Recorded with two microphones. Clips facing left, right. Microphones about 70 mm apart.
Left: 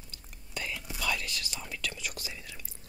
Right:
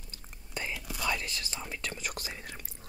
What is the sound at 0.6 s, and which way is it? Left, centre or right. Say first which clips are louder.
Whispering: right 1 dB; right.